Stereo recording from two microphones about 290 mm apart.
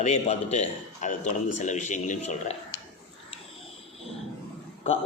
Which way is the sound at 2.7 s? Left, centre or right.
Left.